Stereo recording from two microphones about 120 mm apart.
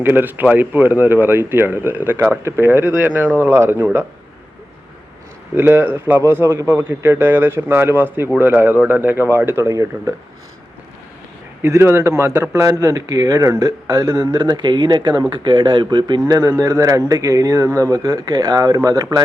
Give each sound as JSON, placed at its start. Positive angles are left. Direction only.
{"t": 0.0, "sound": "speech", "side_deg": -15}
{"t": 5.5, "sound": "a man's voice", "side_deg": -20}
{"t": 11.6, "sound": "a man's voice", "side_deg": -20}